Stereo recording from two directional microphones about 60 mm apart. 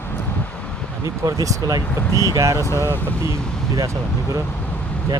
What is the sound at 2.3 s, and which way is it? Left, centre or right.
Speech, right.